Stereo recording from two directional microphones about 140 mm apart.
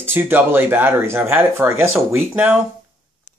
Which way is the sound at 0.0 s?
15° right (ahead or behind).